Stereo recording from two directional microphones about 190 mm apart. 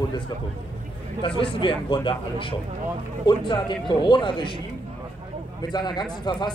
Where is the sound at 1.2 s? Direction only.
25° left (ahead or behind).